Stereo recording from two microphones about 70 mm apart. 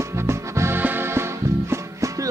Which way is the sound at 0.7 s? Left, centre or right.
Right.